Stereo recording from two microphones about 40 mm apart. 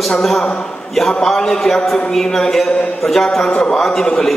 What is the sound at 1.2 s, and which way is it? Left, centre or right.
A man's voice, centre.